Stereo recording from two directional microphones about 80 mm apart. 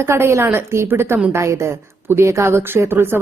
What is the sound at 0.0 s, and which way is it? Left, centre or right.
A woman's voice, right.